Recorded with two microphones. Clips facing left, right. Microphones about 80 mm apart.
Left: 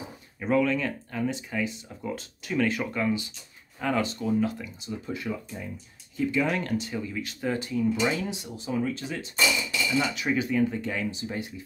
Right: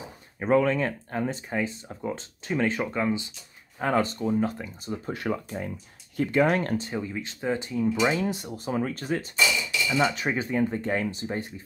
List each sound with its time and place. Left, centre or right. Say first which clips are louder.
0.4 s speech: right 2 dB; right
3.8 s speech: right 2 dB; right
9.9 s speech: right 2 dB; right